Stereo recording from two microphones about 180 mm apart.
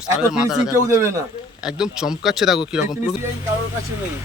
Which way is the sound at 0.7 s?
15° right (ahead or behind).